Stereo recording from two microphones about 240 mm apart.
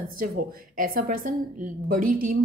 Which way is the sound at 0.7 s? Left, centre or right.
Right.